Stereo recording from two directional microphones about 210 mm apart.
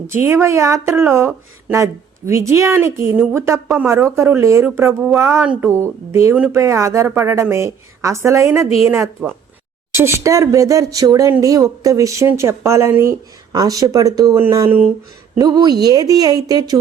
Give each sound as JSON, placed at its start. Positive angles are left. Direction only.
{"t": 0.1, "sound": "a woman's voice", "side_deg": -10}